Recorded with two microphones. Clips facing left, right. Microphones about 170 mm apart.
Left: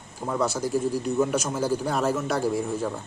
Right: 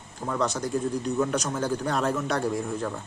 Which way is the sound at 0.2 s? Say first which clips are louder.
Left 2 dB; 5° left (ahead or behind).